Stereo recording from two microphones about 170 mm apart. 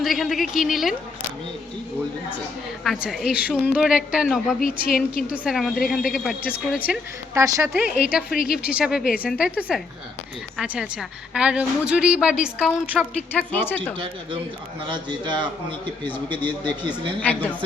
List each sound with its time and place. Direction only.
0.0 s a woman's voice: centre (ahead or behind)
2.8 s a woman's voice: centre (ahead or behind)
4.6 s a woman's voice: 55° left (ahead or behind)
5.5 s a woman's voice: centre (ahead or behind)
8.3 s a woman's voice: 60° left (ahead or behind)
8.7 s a woman's voice: 5° right (ahead or behind)
13.0 s a woman's voice: 10° left (ahead or behind)
14.8 s speech: 25° right (ahead or behind)
17.2 s a woman's voice: 10° left (ahead or behind)